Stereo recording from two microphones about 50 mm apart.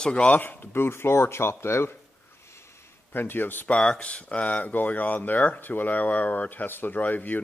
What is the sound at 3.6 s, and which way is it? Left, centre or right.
Speech, left.